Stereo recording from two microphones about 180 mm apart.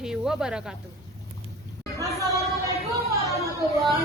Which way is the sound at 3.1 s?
15° right (ahead or behind).